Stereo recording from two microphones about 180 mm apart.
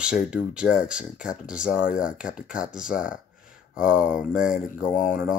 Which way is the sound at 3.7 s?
5° right (ahead or behind).